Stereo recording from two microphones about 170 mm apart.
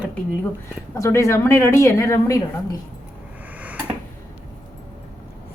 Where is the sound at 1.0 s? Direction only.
20° left (ahead or behind).